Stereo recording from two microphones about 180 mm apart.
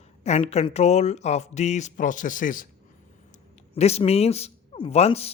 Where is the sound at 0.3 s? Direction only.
35° left (ahead or behind).